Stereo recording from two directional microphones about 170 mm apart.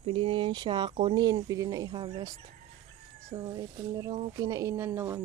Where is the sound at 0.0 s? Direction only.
35° right (ahead or behind).